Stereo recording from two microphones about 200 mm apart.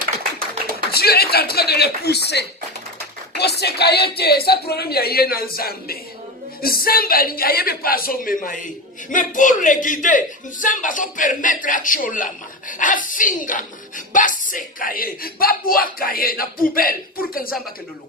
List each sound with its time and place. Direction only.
0.9 s a woman's voice: 50° left (ahead or behind)